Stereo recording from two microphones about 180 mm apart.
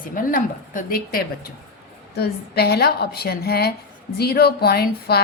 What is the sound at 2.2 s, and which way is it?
A woman's voice, 60° left (ahead or behind).